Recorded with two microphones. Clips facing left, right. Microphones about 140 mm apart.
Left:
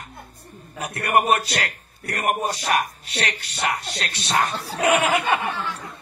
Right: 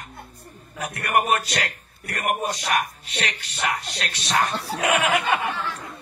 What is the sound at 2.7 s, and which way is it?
Speech, 35° left (ahead or behind).